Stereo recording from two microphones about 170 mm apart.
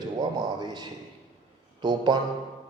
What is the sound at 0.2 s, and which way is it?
A man's voice, 25° right (ahead or behind).